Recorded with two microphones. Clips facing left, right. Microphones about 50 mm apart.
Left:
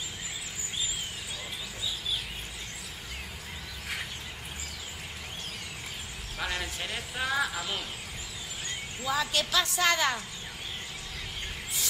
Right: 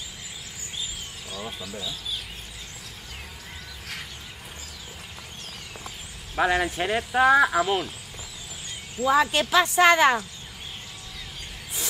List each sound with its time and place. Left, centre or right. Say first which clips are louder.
6.3 s speech: right 11 dB; right
9.0 s speech: right 9 dB; right